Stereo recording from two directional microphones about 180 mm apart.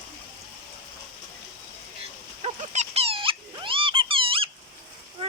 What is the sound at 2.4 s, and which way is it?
Dog, 35° right (ahead or behind).